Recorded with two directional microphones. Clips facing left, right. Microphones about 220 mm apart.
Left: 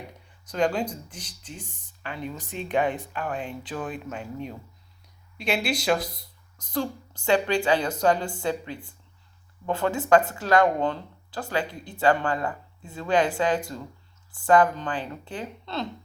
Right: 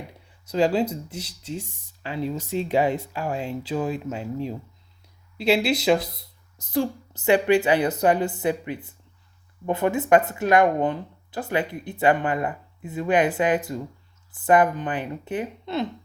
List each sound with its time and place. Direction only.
0.5 s speech: 25° right (ahead or behind)
7.3 s speech: 20° right (ahead or behind)